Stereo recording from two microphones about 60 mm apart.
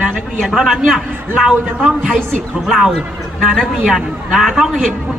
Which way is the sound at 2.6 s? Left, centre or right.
Centre.